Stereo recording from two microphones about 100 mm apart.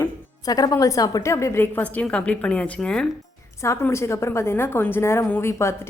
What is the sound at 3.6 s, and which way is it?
A woman's voice, 30° left (ahead or behind).